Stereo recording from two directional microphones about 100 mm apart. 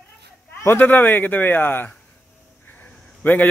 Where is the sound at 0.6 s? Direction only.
20° left (ahead or behind).